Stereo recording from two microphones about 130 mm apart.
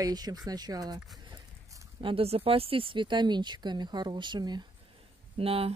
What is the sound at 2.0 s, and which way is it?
A woman's voice, 45° right (ahead or behind).